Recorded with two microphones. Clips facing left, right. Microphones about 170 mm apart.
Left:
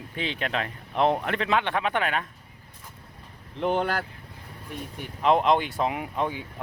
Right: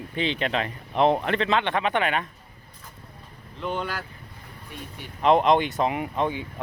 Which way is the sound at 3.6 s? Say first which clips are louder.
Left 5 dB; 55° left (ahead or behind).